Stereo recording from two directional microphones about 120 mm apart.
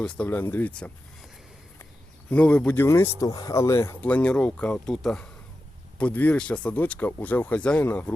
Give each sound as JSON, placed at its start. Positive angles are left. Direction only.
{"t": 0.0, "sound": "speech", "side_deg": 10}
{"t": 2.3, "sound": "speech", "side_deg": 10}
{"t": 2.7, "sound": "speech", "side_deg": 20}
{"t": 4.1, "sound": "speech", "side_deg": 10}